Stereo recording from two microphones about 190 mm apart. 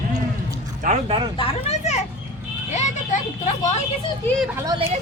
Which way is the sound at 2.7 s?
35° left (ahead or behind).